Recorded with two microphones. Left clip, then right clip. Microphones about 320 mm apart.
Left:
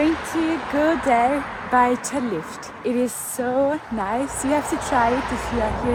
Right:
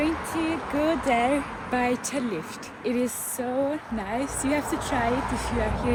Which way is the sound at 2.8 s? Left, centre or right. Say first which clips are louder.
Left 4 dB; centre.